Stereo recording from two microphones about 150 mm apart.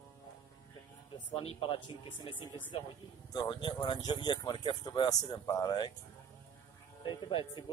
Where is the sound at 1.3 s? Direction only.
40° left (ahead or behind).